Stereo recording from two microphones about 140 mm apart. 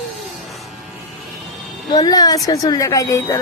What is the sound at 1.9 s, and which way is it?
A woman's voice, 30° left (ahead or behind).